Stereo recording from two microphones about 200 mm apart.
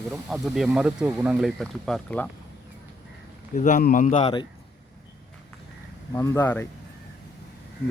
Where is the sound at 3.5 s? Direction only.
40° left (ahead or behind).